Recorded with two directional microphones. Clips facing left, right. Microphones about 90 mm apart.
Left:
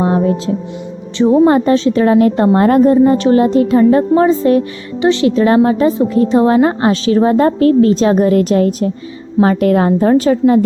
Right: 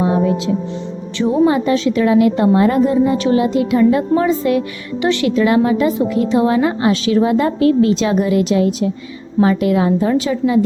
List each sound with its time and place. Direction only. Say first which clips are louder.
0.0 s music: left 2 dB; 40° left (ahead or behind)
1.5 s a woman's voice: left 4 dB; 40° left (ahead or behind)
4.9 s speech: left 4 dB; 25° left (ahead or behind)
5.3 s a woman's voice: left 3 dB; 35° left (ahead or behind)